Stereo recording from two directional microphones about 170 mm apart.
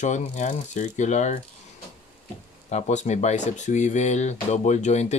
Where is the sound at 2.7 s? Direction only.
40° left (ahead or behind).